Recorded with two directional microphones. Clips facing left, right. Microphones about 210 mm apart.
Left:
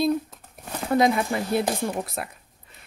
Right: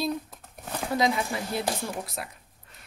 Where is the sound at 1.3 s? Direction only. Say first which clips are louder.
Left 6 dB; 55° left (ahead or behind).